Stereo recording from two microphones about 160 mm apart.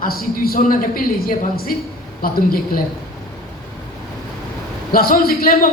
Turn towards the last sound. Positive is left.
turn(degrees=70)  # may be behind; listen again after turning